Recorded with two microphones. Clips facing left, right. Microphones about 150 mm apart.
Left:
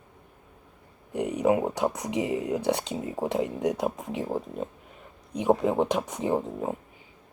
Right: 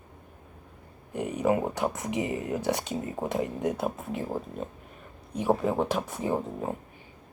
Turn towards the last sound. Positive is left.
turn(degrees=15)  # may be behind; listen again after turning